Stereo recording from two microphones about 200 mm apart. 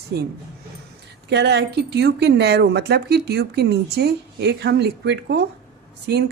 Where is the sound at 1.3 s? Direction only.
60° right (ahead or behind).